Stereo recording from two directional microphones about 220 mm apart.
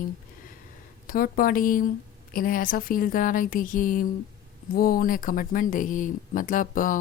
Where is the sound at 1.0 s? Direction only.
40° left (ahead or behind).